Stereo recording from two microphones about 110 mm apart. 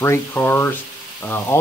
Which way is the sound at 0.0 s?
20° left (ahead or behind).